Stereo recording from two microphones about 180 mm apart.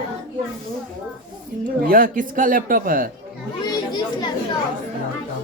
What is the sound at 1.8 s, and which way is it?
A man's voice, 50° right (ahead or behind).